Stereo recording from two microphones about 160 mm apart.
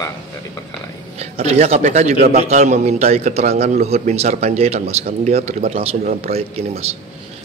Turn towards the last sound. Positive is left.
turn(degrees=-40)  # may be behind; listen again after turning